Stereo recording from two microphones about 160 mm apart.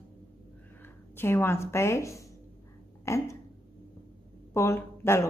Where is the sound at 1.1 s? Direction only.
15° left (ahead or behind).